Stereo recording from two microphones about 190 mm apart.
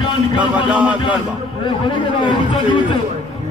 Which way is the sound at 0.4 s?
5° right (ahead or behind).